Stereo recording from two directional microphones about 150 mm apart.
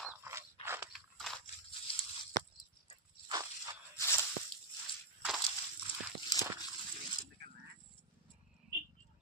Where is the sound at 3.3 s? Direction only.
25° right (ahead or behind).